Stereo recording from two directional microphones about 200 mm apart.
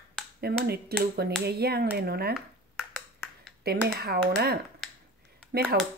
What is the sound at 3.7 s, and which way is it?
Speech, 50° right (ahead or behind).